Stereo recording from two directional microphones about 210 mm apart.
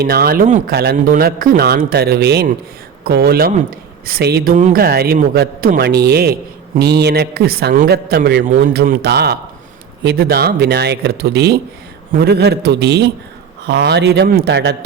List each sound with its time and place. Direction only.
0.0 s speech: 45° right (ahead or behind)
0.7 s speech: 50° right (ahead or behind)